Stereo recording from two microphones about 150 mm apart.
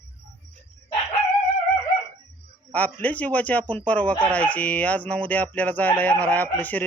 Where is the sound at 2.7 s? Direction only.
10° left (ahead or behind).